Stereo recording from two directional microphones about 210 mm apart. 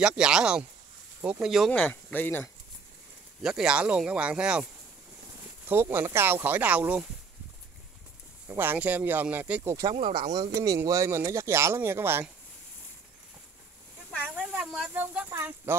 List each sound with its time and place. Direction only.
0.0 s speech: 5° right (ahead or behind)
3.4 s speech: 5° right (ahead or behind)
5.7 s speech: 10° right (ahead or behind)
8.5 s speech: 10° right (ahead or behind)
9.9 s speech: 25° right (ahead or behind); by 12.3 s 10° right (ahead or behind)
14.3 s speech: 5° right (ahead or behind)